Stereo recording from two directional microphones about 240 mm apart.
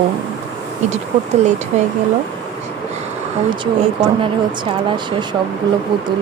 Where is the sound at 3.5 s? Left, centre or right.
Right.